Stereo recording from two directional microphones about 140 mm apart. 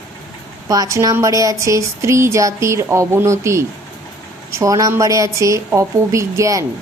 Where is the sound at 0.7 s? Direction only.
25° right (ahead or behind).